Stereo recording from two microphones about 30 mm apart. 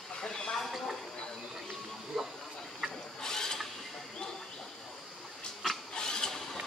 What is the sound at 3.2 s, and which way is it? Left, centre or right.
Vehicle, centre.